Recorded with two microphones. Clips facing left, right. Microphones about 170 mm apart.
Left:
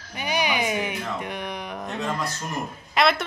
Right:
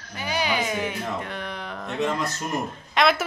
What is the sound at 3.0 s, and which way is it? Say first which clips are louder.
Speech: even; centre (ahead or behind).